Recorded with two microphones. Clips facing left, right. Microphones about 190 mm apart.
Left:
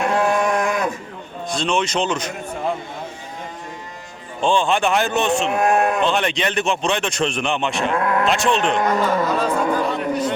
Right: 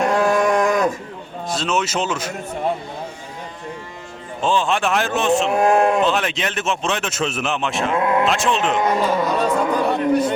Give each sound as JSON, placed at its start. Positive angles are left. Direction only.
{"t": 0.0, "sound": "a sound", "side_deg": -40}
{"t": 1.5, "sound": "speech", "side_deg": -5}
{"t": 4.4, "sound": "speech", "side_deg": -5}
{"t": 5.5, "sound": "speech", "side_deg": -25}
{"t": 6.0, "sound": "speech", "side_deg": -5}
{"t": 7.9, "sound": "speech", "side_deg": -20}
{"t": 8.2, "sound": "speech", "side_deg": 0}
{"t": 8.8, "sound": "speech", "side_deg": -15}
{"t": 9.8, "sound": "a sound", "side_deg": -60}